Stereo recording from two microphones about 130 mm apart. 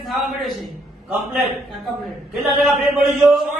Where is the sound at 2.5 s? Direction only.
Centre (ahead or behind).